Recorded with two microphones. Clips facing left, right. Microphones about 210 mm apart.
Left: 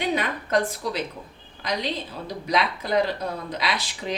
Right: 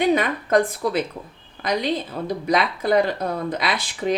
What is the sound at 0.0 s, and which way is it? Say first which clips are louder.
A woman's voice: right 6 dB; 50° right (ahead or behind).